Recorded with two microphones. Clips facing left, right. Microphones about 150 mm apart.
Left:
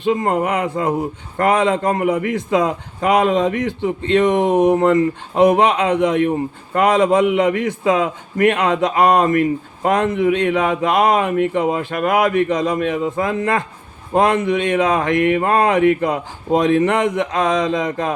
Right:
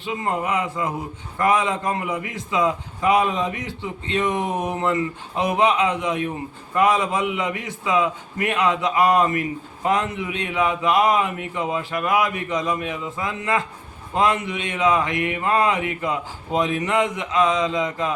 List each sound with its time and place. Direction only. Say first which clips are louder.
0.0 s speech: left 8 dB; 50° left (ahead or behind)